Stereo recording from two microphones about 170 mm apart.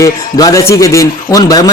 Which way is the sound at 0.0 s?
20° left (ahead or behind).